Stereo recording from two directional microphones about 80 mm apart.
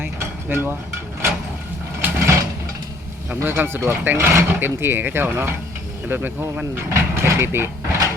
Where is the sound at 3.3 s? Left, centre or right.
Right.